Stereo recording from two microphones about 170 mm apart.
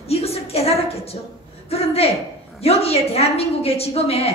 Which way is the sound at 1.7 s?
35° left (ahead or behind).